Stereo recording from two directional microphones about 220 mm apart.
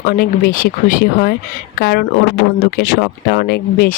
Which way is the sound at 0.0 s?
40° left (ahead or behind).